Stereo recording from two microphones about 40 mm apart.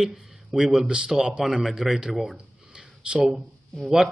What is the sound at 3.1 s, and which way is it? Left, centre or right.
Speech, right.